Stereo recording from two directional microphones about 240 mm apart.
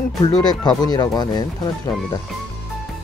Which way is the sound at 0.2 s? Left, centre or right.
Centre.